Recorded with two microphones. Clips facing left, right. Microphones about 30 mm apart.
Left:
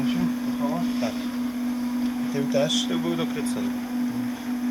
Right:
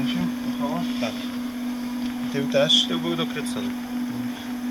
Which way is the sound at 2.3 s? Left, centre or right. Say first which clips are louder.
Right 5 dB; right.